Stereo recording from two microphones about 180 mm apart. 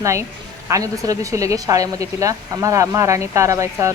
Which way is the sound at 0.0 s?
15° right (ahead or behind).